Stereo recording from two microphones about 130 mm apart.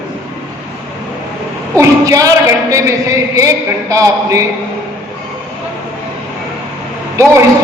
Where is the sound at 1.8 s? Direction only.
25° right (ahead or behind).